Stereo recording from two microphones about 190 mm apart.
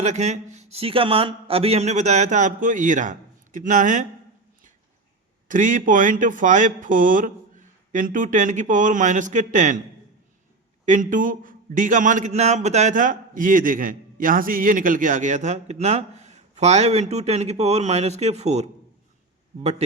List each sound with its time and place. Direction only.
0.0 s a man's voice: 35° right (ahead or behind)
5.5 s speech: 45° right (ahead or behind)
10.8 s a man's voice: 40° right (ahead or behind)